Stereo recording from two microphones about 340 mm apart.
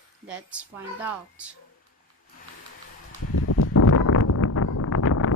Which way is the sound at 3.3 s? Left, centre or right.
Left.